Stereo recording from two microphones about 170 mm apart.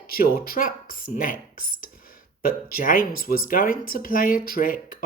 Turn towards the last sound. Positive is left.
turn(degrees=55)  # may be behind; listen again after turning